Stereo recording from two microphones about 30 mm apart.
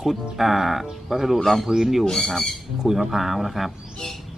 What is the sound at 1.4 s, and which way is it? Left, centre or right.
Speech, centre.